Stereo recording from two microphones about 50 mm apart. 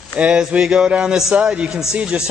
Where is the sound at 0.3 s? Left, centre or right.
Centre.